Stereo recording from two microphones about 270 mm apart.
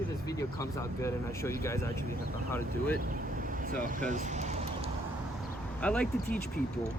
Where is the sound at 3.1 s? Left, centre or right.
Right.